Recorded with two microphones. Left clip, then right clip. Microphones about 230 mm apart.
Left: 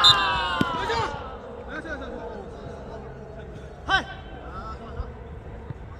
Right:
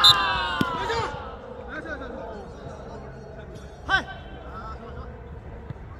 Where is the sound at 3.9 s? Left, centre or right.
Centre.